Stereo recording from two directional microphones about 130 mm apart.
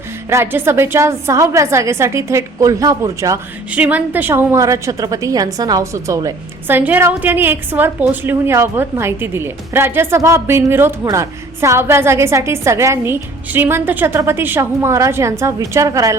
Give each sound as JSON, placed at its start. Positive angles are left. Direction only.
{"t": 0.3, "sound": "a woman's voice", "side_deg": -20}
{"t": 3.7, "sound": "a woman's voice", "side_deg": -10}